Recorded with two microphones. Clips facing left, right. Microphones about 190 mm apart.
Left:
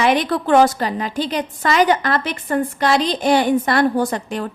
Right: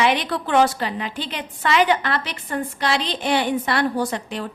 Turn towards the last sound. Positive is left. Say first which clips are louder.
# left 4 dB
turn(degrees=50)  # may be behind; listen again after turning